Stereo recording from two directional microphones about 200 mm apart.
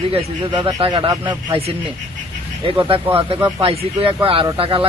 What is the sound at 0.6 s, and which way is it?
Speech, 20° right (ahead or behind).